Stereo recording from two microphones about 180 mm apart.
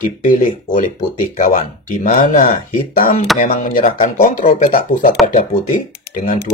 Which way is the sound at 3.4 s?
50° left (ahead or behind).